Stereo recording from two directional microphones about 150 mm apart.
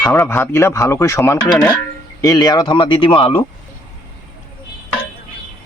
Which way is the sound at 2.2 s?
25° left (ahead or behind).